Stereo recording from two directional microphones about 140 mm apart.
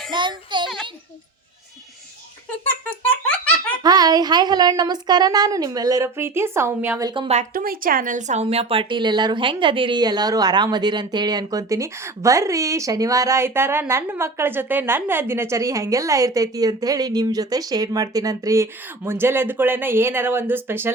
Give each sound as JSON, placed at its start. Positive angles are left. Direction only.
{"t": 0.1, "sound": "child singing", "side_deg": -35}
{"t": 3.1, "sound": "giggle", "side_deg": 10}
{"t": 3.8, "sound": "speech", "side_deg": -30}
{"t": 7.0, "sound": "speech", "side_deg": -35}
{"t": 7.5, "sound": "speech", "side_deg": -90}